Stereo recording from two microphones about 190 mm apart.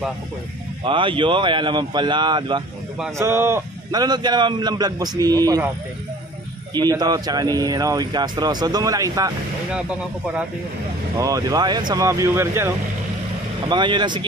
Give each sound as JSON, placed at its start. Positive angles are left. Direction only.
{"t": 0.8, "sound": "speech", "side_deg": -25}
{"t": 3.2, "sound": "speech", "side_deg": -15}
{"t": 6.7, "sound": "speech", "side_deg": -20}
{"t": 9.7, "sound": "speech", "side_deg": -5}
{"t": 11.1, "sound": "speech", "side_deg": -20}
{"t": 13.7, "sound": "speech", "side_deg": -25}